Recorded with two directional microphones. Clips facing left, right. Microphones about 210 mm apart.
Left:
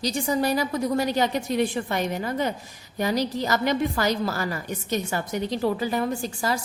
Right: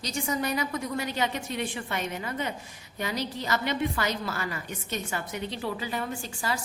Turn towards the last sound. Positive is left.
turn(degrees=40)  # may be behind; listen again after turning